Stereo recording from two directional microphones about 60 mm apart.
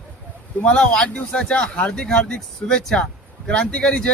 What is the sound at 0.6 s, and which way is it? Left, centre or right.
Speech, centre.